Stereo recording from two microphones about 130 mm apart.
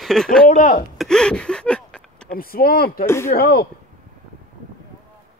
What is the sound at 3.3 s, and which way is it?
Speech, 90° left.